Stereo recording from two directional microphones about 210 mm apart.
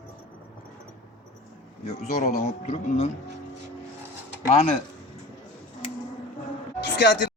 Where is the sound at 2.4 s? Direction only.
35° left (ahead or behind).